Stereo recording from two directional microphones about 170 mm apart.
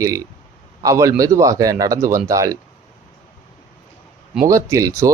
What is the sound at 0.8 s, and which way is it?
Speech, 20° right (ahead or behind).